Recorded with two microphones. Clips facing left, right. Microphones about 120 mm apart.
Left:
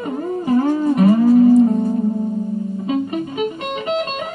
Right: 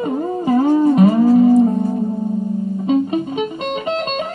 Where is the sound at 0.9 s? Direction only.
25° right (ahead or behind).